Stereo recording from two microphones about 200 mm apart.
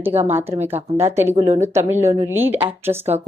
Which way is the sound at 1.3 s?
35° right (ahead or behind).